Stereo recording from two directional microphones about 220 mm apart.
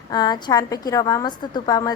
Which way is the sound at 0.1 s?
20° left (ahead or behind).